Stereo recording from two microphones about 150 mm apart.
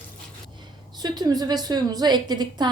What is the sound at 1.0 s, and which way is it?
A woman's voice, 25° right (ahead or behind).